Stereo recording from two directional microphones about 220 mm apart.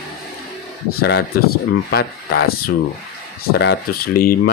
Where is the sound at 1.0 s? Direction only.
45° left (ahead or behind).